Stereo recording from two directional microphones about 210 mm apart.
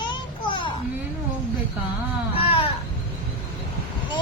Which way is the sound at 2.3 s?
25° left (ahead or behind).